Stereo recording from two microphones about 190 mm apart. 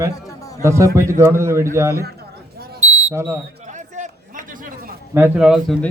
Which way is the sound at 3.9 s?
40° right (ahead or behind).